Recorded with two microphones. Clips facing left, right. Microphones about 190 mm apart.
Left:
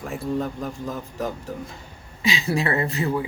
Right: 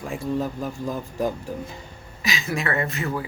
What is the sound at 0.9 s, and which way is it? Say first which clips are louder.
Speech: right 5 dB; 15° right (ahead or behind).